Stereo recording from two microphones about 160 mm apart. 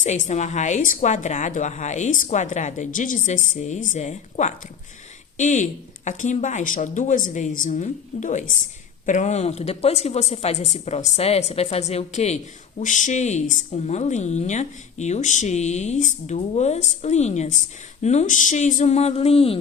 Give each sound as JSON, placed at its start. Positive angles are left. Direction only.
{"t": 0.0, "sound": "a woman's voice", "side_deg": 45}